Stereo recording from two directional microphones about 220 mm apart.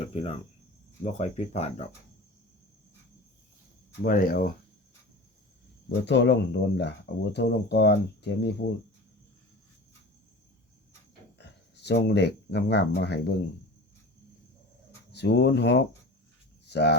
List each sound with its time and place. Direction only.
0.0 s cricket: 30° left (ahead or behind)
4.0 s speech: 40° left (ahead or behind)
6.1 s speech: 50° left (ahead or behind)
11.3 s speech: 50° left (ahead or behind)
15.1 s speech: 50° left (ahead or behind)